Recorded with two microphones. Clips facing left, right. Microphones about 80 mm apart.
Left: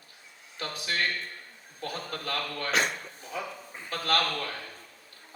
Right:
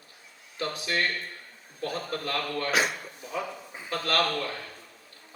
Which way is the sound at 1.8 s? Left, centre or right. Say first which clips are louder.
Right 4 dB; right.